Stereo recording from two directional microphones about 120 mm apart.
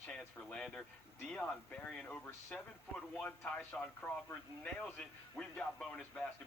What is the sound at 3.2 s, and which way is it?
Speech, 15° left (ahead or behind).